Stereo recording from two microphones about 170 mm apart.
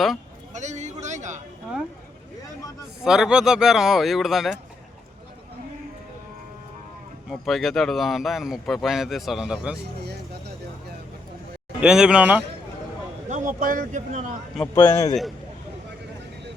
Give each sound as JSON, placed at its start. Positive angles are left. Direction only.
{"t": 0.5, "sound": "speech", "side_deg": -45}
{"t": 3.0, "sound": "a man's voice", "side_deg": -5}
{"t": 7.3, "sound": "a man's voice", "side_deg": 0}
{"t": 11.8, "sound": "a man's voice", "side_deg": -5}
{"t": 13.2, "sound": "speech", "side_deg": -45}
{"t": 14.5, "sound": "a man's voice", "side_deg": 10}